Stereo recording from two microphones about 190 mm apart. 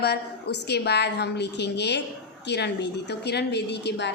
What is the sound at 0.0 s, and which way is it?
A woman's voice, 60° left (ahead or behind).